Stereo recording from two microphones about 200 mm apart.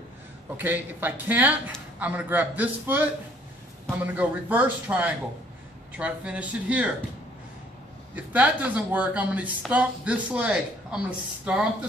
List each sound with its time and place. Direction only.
0.6 s speech: 10° right (ahead or behind)
8.1 s speech: 10° right (ahead or behind)